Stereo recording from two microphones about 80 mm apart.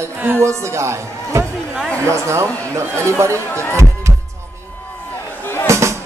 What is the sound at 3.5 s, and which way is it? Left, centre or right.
Speech, left.